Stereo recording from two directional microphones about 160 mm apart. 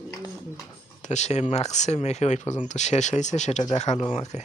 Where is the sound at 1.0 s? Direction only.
45° left (ahead or behind).